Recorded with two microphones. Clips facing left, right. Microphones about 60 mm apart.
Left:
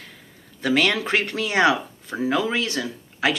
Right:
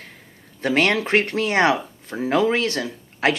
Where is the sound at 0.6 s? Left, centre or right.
Right.